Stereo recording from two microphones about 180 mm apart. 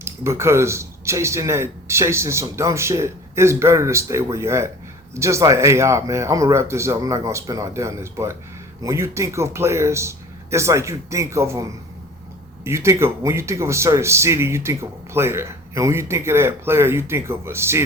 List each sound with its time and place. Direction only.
0.0 s a man's voice: 15° right (ahead or behind)